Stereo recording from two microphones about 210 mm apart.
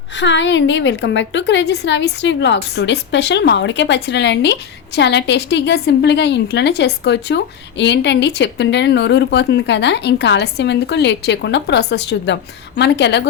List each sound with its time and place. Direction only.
0.2 s a woman's voice: 60° left (ahead or behind)